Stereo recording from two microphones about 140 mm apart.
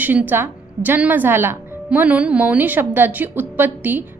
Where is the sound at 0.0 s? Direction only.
15° right (ahead or behind).